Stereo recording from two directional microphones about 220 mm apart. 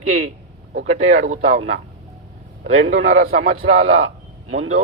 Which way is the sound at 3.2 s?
45° right (ahead or behind).